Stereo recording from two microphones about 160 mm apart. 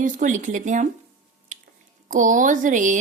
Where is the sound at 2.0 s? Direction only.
55° right (ahead or behind).